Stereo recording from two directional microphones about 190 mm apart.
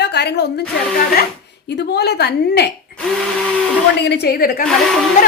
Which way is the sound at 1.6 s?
60° left (ahead or behind).